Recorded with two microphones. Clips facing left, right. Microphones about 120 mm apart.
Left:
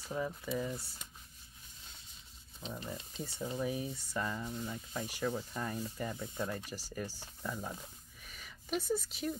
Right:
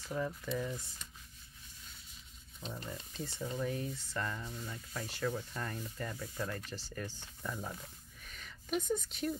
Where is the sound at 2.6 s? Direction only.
Centre (ahead or behind).